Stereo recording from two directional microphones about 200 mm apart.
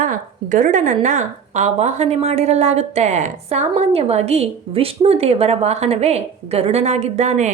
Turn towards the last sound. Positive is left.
turn(degrees=-35)  # may be behind; listen again after turning